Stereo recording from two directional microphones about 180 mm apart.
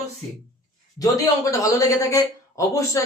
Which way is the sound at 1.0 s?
20° left (ahead or behind).